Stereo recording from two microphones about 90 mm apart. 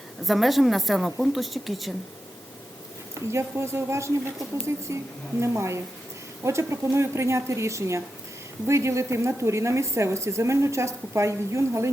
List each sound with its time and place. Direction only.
0.3 s a woman's voice: centre (ahead or behind)
3.3 s a woman's voice: 30° right (ahead or behind)